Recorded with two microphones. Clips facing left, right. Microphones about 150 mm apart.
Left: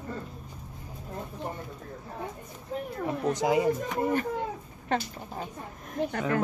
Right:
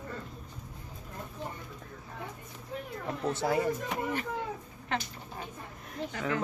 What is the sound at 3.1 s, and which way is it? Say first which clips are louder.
Speech: left 4 dB; 15° left (ahead or behind).